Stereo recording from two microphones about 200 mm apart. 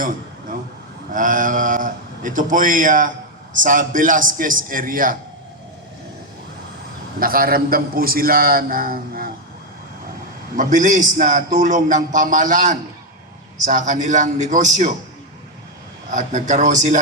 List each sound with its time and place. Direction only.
1.1 s a man's voice: 40° right (ahead or behind)
7.2 s a man's voice: 45° right (ahead or behind)
10.6 s a man's voice: 40° right (ahead or behind)
16.1 s a man's voice: 35° right (ahead or behind)